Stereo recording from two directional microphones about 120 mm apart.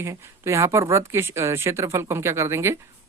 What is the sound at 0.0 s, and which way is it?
Speech, 20° right (ahead or behind).